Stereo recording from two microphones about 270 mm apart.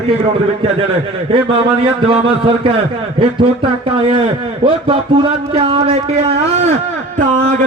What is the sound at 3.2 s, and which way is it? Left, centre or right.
Speech, centre.